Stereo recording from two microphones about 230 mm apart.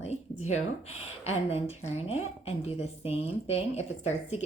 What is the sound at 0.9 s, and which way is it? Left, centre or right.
Speech, left.